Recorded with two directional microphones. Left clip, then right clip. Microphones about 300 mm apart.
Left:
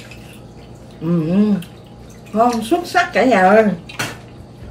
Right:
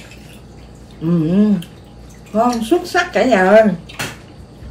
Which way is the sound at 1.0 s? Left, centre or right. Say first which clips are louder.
Right 2 dB; centre.